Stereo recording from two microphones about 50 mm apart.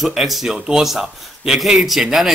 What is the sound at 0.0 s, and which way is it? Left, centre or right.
A man's voice, centre.